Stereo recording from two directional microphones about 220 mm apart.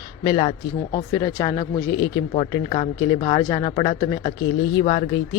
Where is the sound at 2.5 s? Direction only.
30° left (ahead or behind).